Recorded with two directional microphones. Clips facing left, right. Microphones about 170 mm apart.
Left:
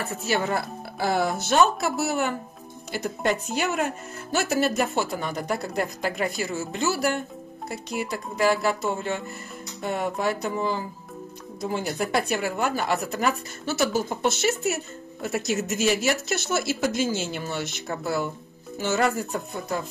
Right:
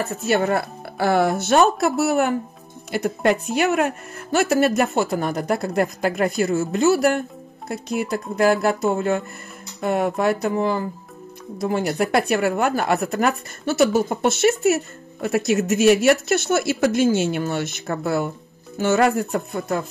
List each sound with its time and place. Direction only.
0.3 s speech: 60° right (ahead or behind)